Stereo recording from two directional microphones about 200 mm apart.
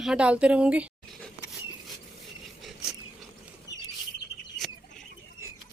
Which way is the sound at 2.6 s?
Centre (ahead or behind).